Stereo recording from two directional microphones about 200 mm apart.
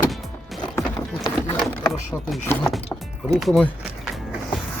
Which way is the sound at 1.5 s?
Centre (ahead or behind).